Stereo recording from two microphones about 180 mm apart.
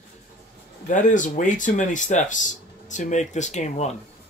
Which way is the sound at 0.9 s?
45° left (ahead or behind).